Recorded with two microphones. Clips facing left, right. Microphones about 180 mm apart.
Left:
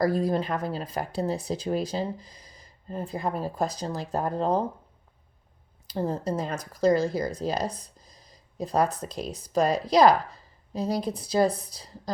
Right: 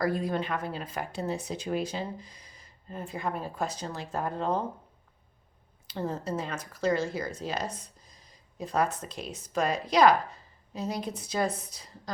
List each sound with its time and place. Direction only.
0.0 s speech: 35° left (ahead or behind)
5.9 s speech: 35° left (ahead or behind)